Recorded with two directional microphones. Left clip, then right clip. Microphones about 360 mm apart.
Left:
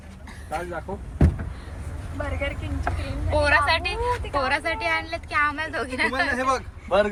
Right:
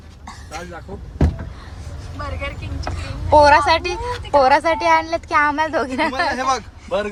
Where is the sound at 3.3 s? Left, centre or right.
Centre.